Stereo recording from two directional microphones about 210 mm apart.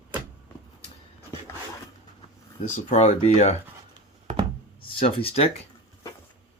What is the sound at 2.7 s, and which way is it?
Speech, 30° left (ahead or behind).